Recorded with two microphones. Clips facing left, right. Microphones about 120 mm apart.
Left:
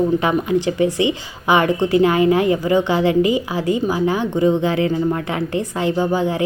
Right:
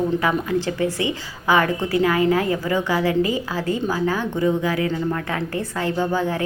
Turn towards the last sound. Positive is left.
turn(degrees=15)  # may be behind; listen again after turning